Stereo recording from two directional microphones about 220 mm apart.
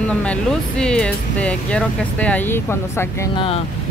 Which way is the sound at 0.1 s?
5° left (ahead or behind).